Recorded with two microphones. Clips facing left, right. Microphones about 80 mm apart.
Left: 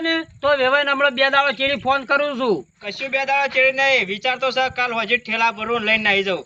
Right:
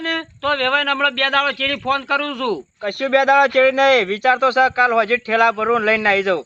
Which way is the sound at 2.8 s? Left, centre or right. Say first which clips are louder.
Right 11 dB; right.